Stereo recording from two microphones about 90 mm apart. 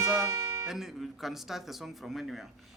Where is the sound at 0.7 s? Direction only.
5° right (ahead or behind).